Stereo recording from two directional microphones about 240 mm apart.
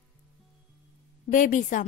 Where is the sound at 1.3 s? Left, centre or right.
Left.